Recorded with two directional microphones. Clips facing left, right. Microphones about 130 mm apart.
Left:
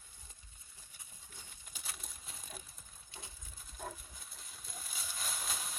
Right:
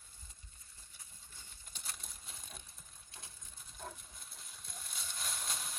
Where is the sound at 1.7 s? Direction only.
Centre (ahead or behind).